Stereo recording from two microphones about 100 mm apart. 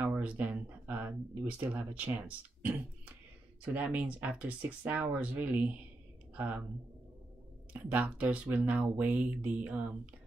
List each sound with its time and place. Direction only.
0.0 s a sound: 15° right (ahead or behind)
2.1 s speech: 15° right (ahead or behind)
7.9 s speech: 15° right (ahead or behind)